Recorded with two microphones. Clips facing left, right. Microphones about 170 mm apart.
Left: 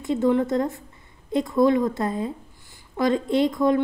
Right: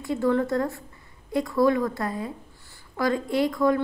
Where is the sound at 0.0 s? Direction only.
20° left (ahead or behind).